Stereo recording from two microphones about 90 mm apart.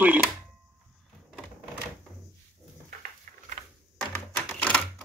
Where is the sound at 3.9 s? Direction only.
15° left (ahead or behind).